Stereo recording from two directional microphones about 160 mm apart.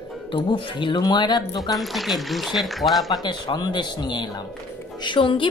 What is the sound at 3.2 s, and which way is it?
A woman's voice, 30° left (ahead or behind).